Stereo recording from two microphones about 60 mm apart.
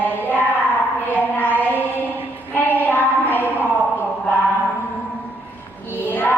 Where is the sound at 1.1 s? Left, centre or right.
Left.